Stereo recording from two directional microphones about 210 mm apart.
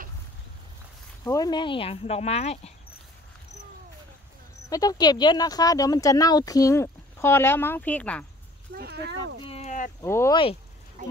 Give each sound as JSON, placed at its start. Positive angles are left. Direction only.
{"t": 1.2, "sound": "speech", "side_deg": 15}
{"t": 4.6, "sound": "speech", "side_deg": 15}
{"t": 8.7, "sound": "speech", "side_deg": -50}
{"t": 9.4, "sound": "speech", "side_deg": 30}
{"t": 10.0, "sound": "speech", "side_deg": 15}
{"t": 11.0, "sound": "speech", "side_deg": -40}